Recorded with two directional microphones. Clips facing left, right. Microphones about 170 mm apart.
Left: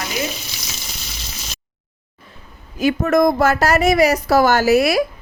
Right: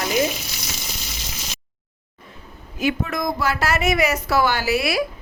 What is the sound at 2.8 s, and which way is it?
A woman's voice, 40° left (ahead or behind).